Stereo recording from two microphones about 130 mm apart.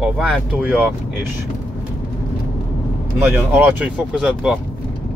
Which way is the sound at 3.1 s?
15° right (ahead or behind).